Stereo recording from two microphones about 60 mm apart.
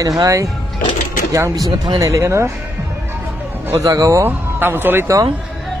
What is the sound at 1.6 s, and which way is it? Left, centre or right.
Speech, right.